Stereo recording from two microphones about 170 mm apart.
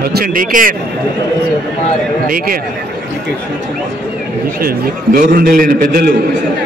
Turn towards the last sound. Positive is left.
turn(degrees=-60)  # may be behind; listen again after turning